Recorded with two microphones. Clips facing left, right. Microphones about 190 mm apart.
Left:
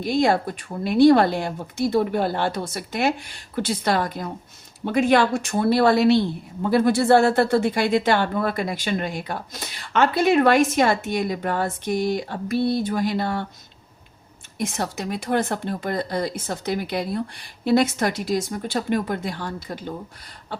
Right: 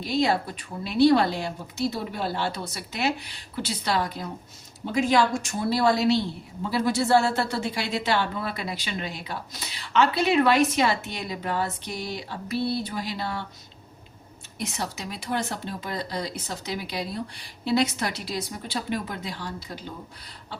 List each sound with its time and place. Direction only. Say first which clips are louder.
0.0 s a woman's voice: left 4 dB; 50° left (ahead or behind)
14.6 s a woman's voice: left 5 dB; 50° left (ahead or behind)
20.5 s beatboxing: left 6 dB; 50° left (ahead or behind)